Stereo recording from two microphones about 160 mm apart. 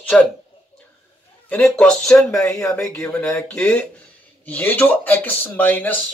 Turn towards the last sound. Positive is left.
turn(degrees=10)  # may be behind; listen again after turning